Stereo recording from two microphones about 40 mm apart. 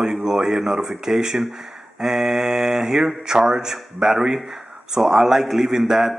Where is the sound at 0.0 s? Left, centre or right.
Centre.